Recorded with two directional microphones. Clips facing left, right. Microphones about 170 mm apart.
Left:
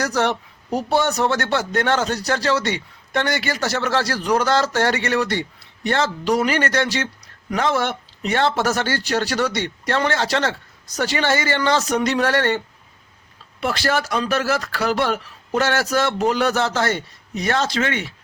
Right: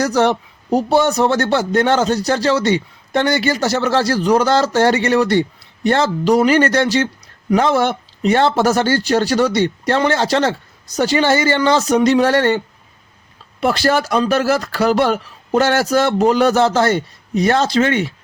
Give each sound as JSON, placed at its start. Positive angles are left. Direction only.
{"t": 0.0, "sound": "a man's voice", "side_deg": -30}